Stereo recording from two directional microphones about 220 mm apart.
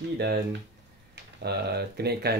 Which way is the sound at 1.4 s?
45° right (ahead or behind).